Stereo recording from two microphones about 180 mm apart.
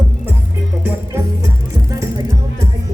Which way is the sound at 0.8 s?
15° right (ahead or behind).